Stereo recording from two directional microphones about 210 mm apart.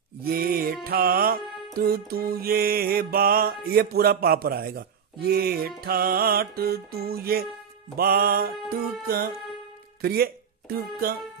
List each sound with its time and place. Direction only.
0.2 s music: 45° right (ahead or behind)
10.0 s speech: 45° right (ahead or behind)